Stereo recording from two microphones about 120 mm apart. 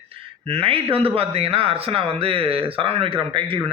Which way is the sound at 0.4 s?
50° right (ahead or behind).